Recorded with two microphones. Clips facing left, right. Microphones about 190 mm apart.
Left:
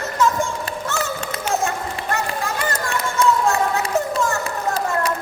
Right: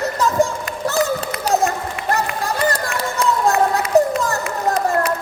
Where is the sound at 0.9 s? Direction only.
35° right (ahead or behind).